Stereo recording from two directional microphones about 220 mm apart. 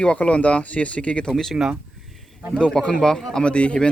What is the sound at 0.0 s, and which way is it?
Speech, 5° left (ahead or behind).